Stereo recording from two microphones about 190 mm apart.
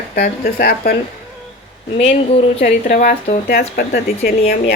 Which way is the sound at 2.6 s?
40° left (ahead or behind).